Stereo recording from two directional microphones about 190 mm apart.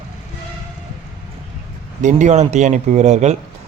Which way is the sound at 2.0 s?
40° right (ahead or behind).